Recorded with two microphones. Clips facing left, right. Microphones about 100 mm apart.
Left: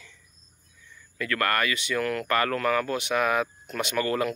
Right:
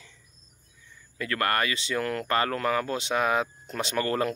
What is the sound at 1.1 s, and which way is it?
Speech, 30° right (ahead or behind).